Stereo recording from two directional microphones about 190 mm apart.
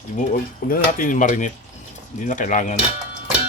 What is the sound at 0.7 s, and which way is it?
Speech, 45° left (ahead or behind).